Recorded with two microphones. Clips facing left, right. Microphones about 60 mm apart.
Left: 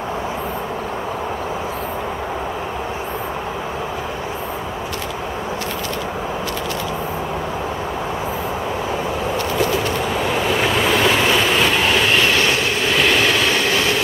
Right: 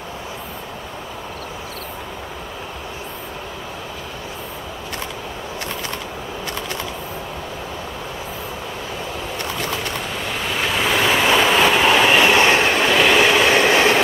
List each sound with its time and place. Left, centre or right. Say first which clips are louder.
10.1 s train: left 6 dB; centre
12.4 s train: right 3 dB; right
13.0 s train: right 2 dB; centre